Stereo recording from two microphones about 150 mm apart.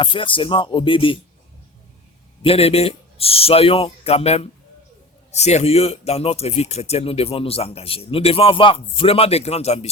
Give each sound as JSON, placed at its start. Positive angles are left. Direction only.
{"t": 0.0, "sound": "speech", "side_deg": 35}
{"t": 2.4, "sound": "speech", "side_deg": 40}